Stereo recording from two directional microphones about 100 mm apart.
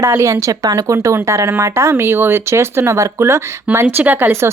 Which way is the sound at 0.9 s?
25° right (ahead or behind).